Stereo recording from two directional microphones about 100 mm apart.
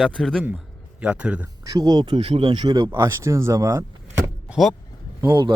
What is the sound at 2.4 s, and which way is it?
Speech, 45° right (ahead or behind).